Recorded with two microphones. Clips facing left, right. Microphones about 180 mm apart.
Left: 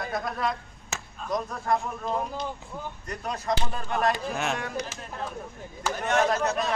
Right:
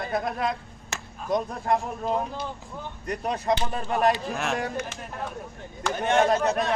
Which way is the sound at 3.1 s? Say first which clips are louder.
Right 5 dB; 30° right (ahead or behind).